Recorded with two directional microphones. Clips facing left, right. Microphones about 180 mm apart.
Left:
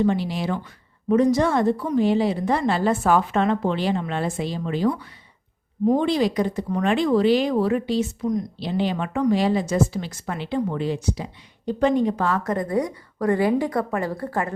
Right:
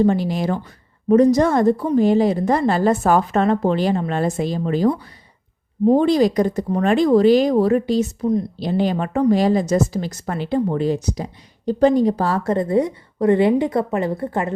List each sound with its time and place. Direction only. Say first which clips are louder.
0.0 s a woman's voice: right 4 dB; 45° right (ahead or behind); by 14.5 s 25° right (ahead or behind)